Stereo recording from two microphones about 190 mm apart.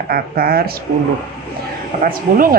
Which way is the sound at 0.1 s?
55° right (ahead or behind).